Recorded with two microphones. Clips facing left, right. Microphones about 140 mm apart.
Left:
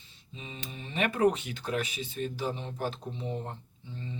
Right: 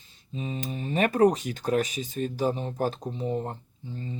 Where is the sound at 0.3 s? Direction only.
40° right (ahead or behind).